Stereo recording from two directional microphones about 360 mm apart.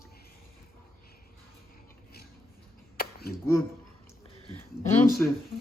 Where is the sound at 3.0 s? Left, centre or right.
Left.